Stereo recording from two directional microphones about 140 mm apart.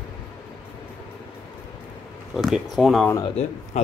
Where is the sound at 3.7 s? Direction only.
55° left (ahead or behind).